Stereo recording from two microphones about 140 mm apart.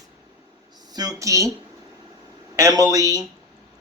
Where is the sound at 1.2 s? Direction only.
20° right (ahead or behind).